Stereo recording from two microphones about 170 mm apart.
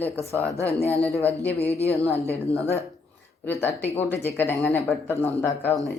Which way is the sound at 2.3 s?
35° left (ahead or behind).